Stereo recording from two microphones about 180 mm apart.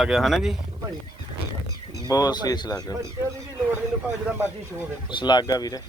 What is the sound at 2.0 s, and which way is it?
Speech, 20° left (ahead or behind).